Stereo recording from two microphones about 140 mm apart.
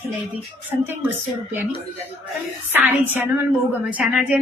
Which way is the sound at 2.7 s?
15° right (ahead or behind).